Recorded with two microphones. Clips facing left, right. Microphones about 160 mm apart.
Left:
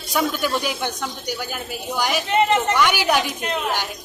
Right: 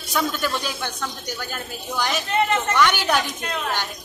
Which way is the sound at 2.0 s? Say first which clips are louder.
Left 3 dB; 10° left (ahead or behind).